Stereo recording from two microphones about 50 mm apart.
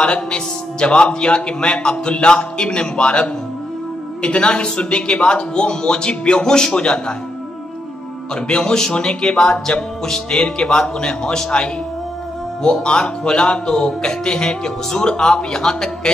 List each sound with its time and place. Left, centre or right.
0.0 s a man's voice: centre
8.5 s a man's voice: centre